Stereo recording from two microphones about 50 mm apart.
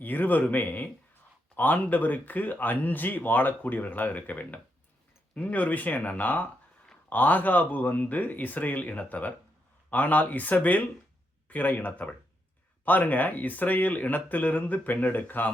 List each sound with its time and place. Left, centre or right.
0.0 s speech: left